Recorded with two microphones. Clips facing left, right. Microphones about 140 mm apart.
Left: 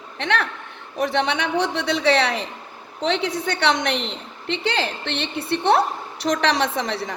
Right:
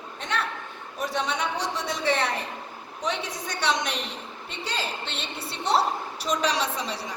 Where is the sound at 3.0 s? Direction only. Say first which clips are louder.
Left 8 dB; 65° left (ahead or behind).